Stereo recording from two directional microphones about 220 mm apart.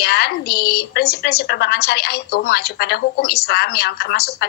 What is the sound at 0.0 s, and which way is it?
A woman's voice, 45° left (ahead or behind).